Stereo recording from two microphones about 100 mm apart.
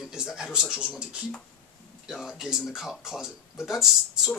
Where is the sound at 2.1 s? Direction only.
5° right (ahead or behind).